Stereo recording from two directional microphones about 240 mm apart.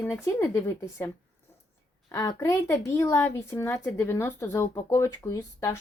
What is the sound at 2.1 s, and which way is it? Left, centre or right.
A woman's voice, centre.